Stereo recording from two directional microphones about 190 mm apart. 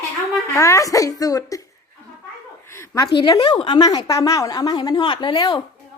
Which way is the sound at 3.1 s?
25° left (ahead or behind).